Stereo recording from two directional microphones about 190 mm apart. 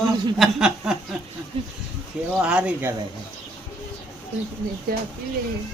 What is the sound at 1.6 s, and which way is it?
Speech, 30° right (ahead or behind).